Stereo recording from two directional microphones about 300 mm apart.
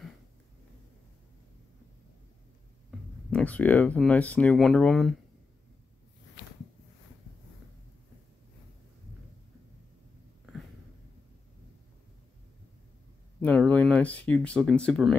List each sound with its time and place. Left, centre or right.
3.3 s speech: centre
13.4 s speech: centre